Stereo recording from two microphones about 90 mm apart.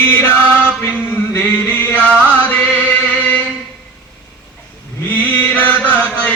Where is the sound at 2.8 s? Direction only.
15° left (ahead or behind).